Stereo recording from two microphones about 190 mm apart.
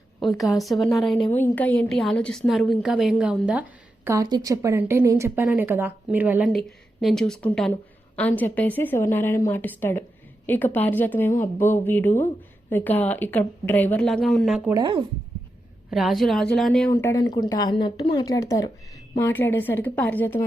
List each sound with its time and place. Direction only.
0.2 s a woman's voice: centre (ahead or behind)
14.7 s speech: 20° right (ahead or behind)
15.9 s a woman's voice: centre (ahead or behind)
16.9 s a woman's voice: 15° left (ahead or behind)